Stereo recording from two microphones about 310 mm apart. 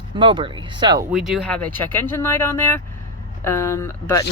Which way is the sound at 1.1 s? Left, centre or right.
Centre.